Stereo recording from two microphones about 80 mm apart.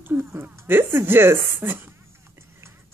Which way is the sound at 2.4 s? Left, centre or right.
Right.